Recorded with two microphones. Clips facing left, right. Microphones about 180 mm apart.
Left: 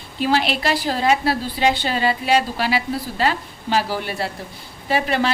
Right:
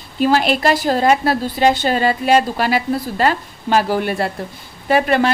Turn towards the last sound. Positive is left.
turn(degrees=-55)  # may be behind; listen again after turning